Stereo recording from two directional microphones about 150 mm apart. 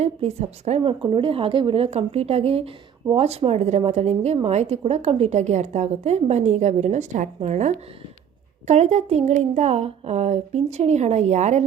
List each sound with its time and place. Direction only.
0.0 s a woman's voice: 45° right (ahead or behind)